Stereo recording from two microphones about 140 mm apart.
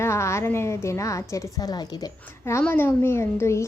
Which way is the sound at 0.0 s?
20° left (ahead or behind).